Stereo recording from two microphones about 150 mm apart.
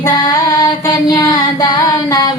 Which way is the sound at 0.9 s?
30° left (ahead or behind).